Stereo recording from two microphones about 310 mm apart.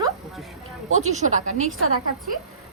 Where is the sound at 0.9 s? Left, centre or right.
Right.